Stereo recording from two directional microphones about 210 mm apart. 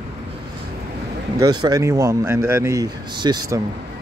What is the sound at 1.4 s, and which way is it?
Speech, 20° right (ahead or behind).